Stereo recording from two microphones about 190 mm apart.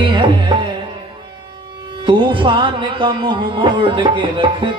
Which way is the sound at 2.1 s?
25° right (ahead or behind).